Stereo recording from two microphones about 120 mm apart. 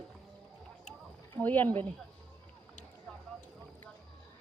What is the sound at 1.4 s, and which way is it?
Speech, 15° left (ahead or behind).